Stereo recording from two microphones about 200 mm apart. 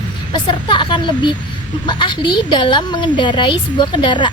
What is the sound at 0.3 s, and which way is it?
A woman's voice, 25° left (ahead or behind).